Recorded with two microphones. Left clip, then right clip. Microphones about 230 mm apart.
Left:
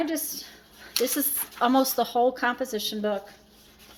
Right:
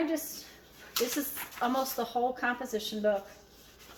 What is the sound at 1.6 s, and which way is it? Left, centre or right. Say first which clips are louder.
A woman's voice: left 8 dB; left.